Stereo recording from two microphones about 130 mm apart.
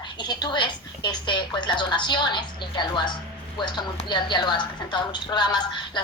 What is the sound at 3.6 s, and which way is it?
A woman's voice, 35° left (ahead or behind).